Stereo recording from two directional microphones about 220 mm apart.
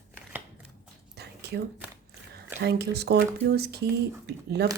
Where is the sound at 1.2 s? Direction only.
50° right (ahead or behind).